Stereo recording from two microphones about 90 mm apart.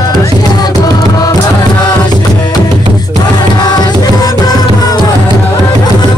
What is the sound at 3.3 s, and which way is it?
Music, 50° left (ahead or behind).